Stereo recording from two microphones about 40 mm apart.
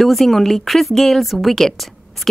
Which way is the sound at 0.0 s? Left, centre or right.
Centre.